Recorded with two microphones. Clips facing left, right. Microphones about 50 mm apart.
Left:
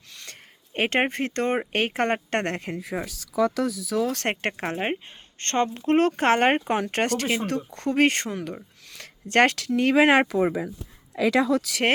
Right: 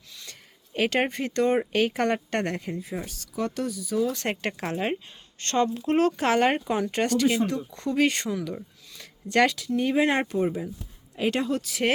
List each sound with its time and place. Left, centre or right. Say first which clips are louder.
0.1 s speech: left 2 dB; left
2.7 s speech: left 3 dB; left
4.6 s speech: right 1 dB; left
8.9 s a sound: left 2 dB; left
9.6 s speech: left 4 dB; left